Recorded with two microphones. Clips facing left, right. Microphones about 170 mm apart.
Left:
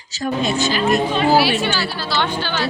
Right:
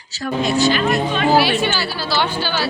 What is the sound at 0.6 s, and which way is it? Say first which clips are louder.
Speech: right 3 dB; 20° left (ahead or behind).